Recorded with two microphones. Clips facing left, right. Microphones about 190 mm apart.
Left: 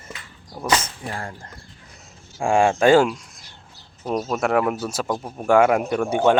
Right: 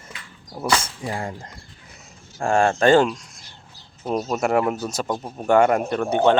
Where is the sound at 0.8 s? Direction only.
15° right (ahead or behind).